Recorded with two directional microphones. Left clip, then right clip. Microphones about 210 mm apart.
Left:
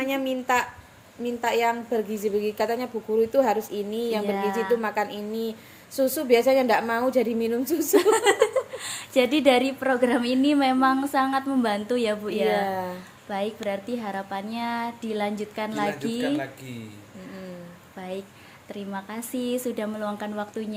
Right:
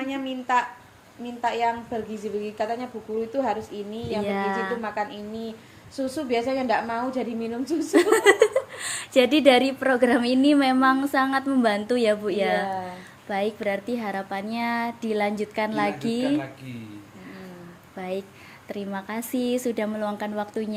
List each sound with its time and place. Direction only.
0.0 s a woman's voice: 55° left (ahead or behind)
4.3 s a woman's voice: 20° right (ahead or behind)
4.8 s a woman's voice: 55° left (ahead or behind)
7.9 s a woman's voice: 20° right (ahead or behind)
12.6 s a woman's voice: 55° left (ahead or behind)
13.2 s a woman's voice: 15° right (ahead or behind)
17.9 s a child's voice: 20° right (ahead or behind)